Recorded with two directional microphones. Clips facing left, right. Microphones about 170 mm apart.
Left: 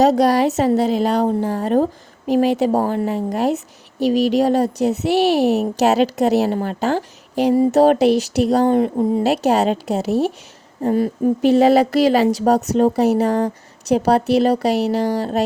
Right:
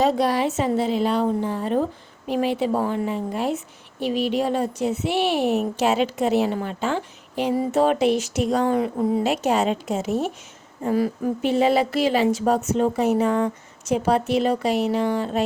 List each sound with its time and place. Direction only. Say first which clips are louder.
0.0 s a woman's voice: left 6 dB; 40° left (ahead or behind)